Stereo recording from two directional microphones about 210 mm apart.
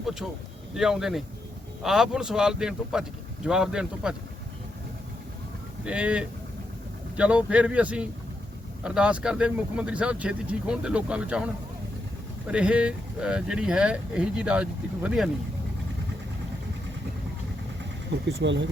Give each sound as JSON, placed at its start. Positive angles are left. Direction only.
{"t": 0.0, "sound": "a sound", "side_deg": 0}
{"t": 0.7, "sound": "speech", "side_deg": 0}
{"t": 5.8, "sound": "speech", "side_deg": -5}
{"t": 12.5, "sound": "speech", "side_deg": -5}
{"t": 18.1, "sound": "speech", "side_deg": -55}